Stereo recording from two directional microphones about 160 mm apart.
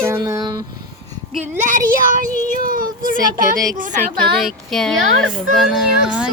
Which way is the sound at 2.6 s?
60° right (ahead or behind).